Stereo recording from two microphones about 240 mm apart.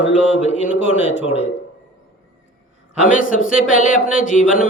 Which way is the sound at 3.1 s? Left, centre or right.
Left.